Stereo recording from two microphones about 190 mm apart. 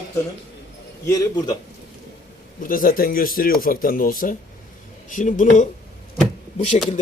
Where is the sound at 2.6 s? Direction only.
45° left (ahead or behind).